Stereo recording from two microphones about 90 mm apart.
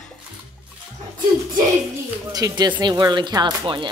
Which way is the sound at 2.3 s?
45° right (ahead or behind).